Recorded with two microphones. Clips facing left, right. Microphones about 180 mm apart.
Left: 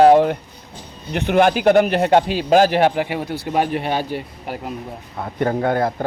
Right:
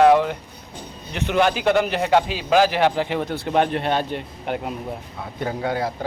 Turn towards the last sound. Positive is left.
turn(degrees=55)  # may be behind; listen again after turning